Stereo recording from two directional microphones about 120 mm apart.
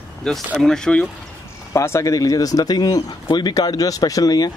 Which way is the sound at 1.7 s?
25° left (ahead or behind).